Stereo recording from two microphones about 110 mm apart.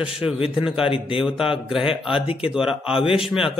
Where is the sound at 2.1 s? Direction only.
55° left (ahead or behind).